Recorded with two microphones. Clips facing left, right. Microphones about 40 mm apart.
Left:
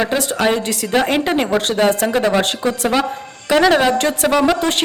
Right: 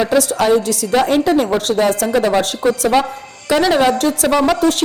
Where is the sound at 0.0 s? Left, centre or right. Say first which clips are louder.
Right 3 dB; left.